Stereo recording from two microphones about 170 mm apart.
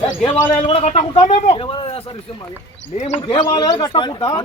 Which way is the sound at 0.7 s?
35° left (ahead or behind).